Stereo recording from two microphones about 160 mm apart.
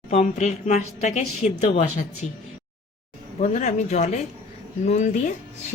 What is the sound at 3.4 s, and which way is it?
A woman's voice, 50° left (ahead or behind).